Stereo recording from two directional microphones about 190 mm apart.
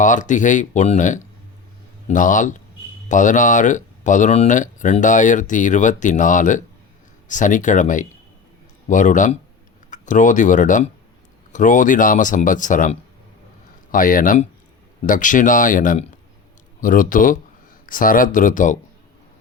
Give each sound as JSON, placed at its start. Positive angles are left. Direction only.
{"t": 0.0, "sound": "speech", "side_deg": 40}